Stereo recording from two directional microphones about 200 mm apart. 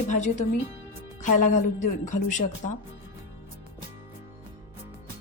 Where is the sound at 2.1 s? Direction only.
40° left (ahead or behind).